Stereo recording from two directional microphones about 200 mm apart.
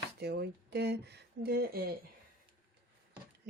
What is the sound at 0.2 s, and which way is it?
Speech, 55° right (ahead or behind).